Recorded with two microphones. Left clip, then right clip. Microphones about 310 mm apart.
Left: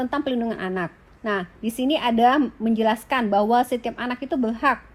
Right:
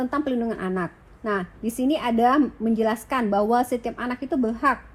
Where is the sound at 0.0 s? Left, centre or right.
Left.